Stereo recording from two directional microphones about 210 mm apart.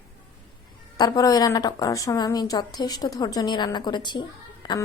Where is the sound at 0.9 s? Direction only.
20° left (ahead or behind).